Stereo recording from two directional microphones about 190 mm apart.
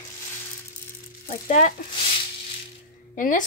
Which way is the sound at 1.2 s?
40° left (ahead or behind).